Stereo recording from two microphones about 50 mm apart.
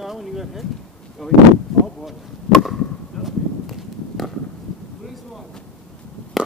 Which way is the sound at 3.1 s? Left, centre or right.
Centre.